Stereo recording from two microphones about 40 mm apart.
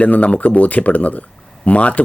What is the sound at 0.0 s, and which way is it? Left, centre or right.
Speech, left.